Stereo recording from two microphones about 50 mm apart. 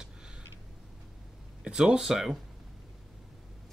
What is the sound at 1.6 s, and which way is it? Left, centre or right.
Speech, centre.